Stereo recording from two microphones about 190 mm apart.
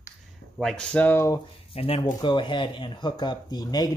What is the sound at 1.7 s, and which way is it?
Speech, 30° left (ahead or behind).